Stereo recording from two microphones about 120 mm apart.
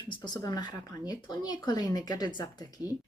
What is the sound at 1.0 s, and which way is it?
Speech, 35° left (ahead or behind).